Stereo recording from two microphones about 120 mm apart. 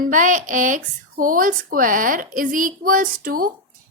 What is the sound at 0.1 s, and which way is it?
A woman's voice, 90° right.